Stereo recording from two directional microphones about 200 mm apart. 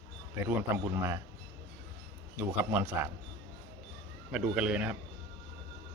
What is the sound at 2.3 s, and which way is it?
Speech, 10° right (ahead or behind).